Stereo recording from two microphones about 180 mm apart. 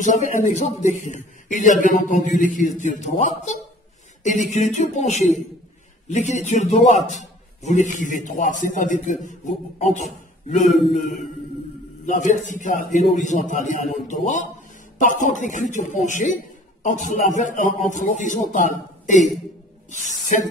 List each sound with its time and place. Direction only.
0.0 s a man's voice: 45° left (ahead or behind)